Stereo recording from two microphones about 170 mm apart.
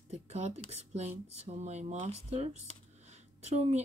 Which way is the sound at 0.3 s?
40° right (ahead or behind).